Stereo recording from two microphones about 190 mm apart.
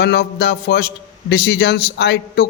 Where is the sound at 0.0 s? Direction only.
60° left (ahead or behind).